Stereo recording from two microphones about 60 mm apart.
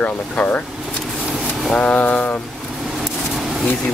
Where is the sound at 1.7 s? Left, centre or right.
Left.